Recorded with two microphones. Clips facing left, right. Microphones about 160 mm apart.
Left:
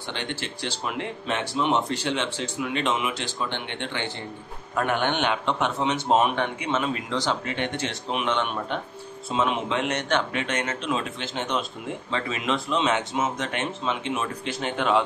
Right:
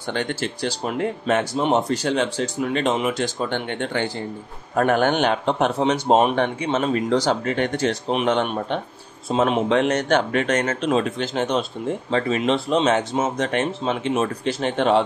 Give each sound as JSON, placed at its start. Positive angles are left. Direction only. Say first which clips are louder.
{"t": 0.1, "sound": "speech", "louder": "right 8 dB", "side_deg": -45}